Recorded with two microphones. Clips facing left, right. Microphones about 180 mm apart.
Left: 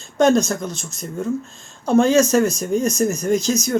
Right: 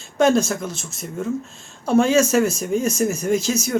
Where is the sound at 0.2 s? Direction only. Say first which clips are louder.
Left 1 dB; 5° right (ahead or behind).